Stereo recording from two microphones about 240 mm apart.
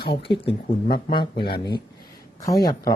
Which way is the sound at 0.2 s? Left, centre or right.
Left.